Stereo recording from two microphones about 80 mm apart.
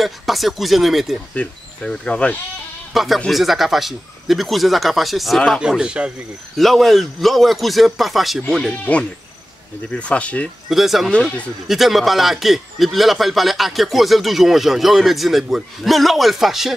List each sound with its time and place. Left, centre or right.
0.0 s a man's voice: centre
1.3 s speech: centre
2.9 s a man's voice: centre
5.6 s speech: centre
6.5 s a man's voice: centre
9.8 s speech: centre
10.7 s a man's voice: centre